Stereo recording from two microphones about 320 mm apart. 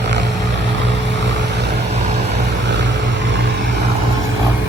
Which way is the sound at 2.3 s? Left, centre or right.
Right.